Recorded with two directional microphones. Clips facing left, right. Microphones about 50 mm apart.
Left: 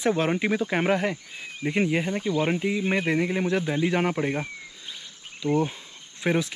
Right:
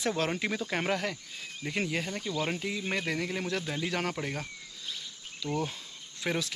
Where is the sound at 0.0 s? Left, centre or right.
Left.